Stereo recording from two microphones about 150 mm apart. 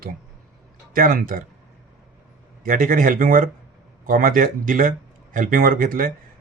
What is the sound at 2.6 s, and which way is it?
Speech, 65° right (ahead or behind).